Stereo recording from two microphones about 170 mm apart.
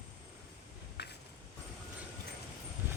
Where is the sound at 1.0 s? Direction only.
80° left.